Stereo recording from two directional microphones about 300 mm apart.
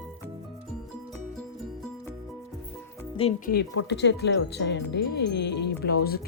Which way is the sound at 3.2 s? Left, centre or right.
Centre.